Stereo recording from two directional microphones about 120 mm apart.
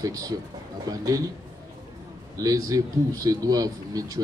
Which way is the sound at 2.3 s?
30° right (ahead or behind).